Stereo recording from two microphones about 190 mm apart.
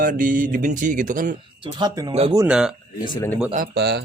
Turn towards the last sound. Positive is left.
turn(degrees=-65)  # may be behind; listen again after turning